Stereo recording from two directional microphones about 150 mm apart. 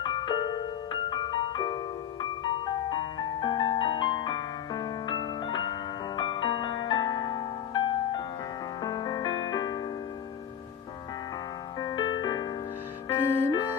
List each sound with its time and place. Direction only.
0.0 s music: 30° left (ahead or behind)
11.8 s music: 30° left (ahead or behind)
13.1 s music: 15° left (ahead or behind)
13.5 s music: 30° left (ahead or behind)